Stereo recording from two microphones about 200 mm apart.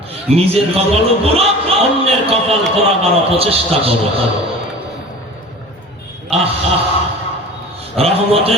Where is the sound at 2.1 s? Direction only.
30° right (ahead or behind).